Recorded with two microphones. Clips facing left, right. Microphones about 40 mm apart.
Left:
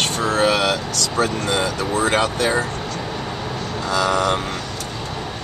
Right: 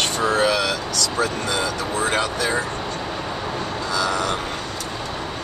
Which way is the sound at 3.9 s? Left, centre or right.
Left.